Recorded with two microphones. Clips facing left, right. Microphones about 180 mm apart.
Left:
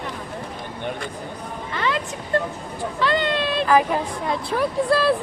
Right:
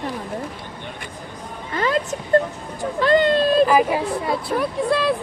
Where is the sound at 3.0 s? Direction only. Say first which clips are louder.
Right 6 dB; 45° right (ahead or behind).